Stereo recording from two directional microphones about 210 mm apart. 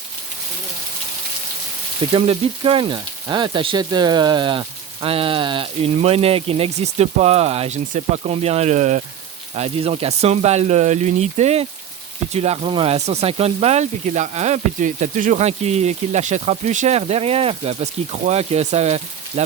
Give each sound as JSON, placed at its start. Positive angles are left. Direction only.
{"t": 2.1, "sound": "speech", "side_deg": -30}